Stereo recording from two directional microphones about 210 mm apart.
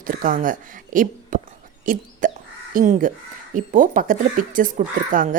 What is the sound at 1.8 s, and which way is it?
Dog, 40° right (ahead or behind).